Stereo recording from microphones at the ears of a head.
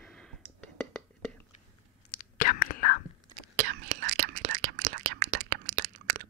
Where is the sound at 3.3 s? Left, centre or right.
Right.